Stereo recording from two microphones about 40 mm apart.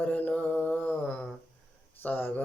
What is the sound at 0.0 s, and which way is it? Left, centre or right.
Mantra, left.